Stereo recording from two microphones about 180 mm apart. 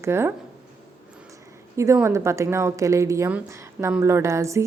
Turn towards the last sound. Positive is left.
turn(degrees=-15)  # may be behind; listen again after turning